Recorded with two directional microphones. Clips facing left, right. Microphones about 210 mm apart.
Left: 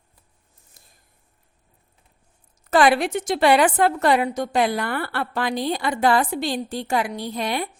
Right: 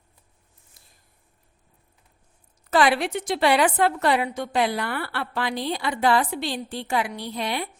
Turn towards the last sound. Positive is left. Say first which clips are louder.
# left 3 dB
turn(degrees=45)  # may be behind; listen again after turning